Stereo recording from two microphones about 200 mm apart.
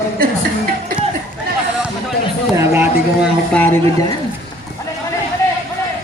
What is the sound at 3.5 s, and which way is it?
Speech, 10° left (ahead or behind).